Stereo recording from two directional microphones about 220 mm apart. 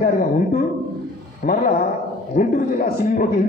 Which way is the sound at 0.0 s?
40° left (ahead or behind).